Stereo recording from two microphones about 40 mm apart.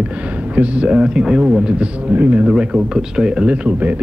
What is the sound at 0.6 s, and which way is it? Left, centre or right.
Speech, right.